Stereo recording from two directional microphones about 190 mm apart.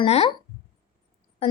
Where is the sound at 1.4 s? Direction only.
30° left (ahead or behind).